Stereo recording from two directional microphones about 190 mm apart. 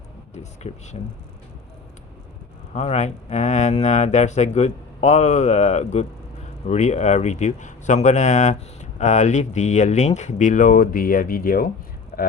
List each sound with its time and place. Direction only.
0.3 s speech: 35° left (ahead or behind)
2.7 s speech: 35° left (ahead or behind)
12.1 s a sound: 50° left (ahead or behind)